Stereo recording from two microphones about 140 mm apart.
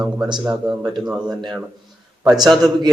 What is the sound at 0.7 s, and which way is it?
Speech, 30° right (ahead or behind).